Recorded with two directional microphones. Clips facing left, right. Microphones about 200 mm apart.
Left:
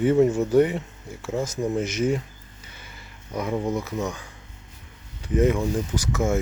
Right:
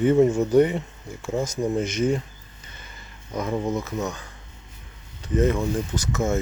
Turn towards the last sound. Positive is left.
turn(degrees=10)  # may be behind; listen again after turning